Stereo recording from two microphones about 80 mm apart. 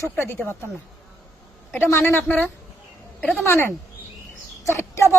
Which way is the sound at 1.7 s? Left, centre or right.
Left.